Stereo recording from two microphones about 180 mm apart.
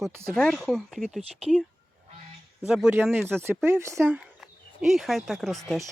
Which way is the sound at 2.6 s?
5° right (ahead or behind).